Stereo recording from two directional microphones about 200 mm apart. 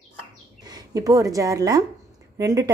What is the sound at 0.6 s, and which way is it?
A woman's voice, 20° right (ahead or behind).